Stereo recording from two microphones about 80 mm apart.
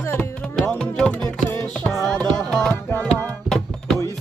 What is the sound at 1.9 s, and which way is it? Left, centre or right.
Music, centre.